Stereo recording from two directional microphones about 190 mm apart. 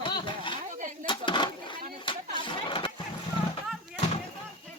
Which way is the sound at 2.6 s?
25° left (ahead or behind).